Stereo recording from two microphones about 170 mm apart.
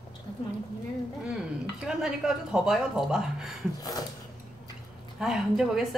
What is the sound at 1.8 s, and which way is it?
Speech, 5° right (ahead or behind).